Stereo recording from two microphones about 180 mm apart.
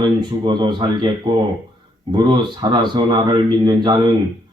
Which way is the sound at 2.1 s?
25° right (ahead or behind).